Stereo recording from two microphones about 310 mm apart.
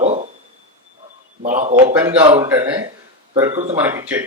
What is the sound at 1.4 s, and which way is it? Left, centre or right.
Speech, right.